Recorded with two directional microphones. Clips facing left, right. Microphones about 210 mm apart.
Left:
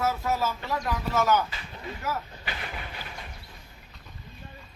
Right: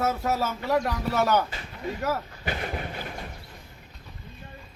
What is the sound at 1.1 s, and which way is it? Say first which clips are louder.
Speech: even; 60° right (ahead or behind).